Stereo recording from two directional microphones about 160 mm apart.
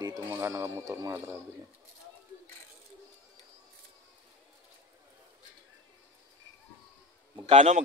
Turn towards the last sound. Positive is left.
turn(degrees=-40)  # may be behind; listen again after turning